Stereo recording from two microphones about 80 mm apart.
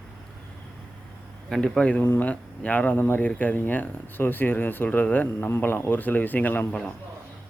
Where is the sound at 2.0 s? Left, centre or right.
Left.